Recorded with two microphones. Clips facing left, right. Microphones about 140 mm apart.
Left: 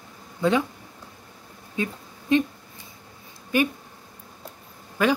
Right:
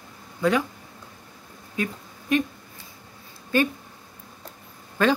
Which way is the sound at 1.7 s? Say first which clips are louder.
Even; 25° left (ahead or behind).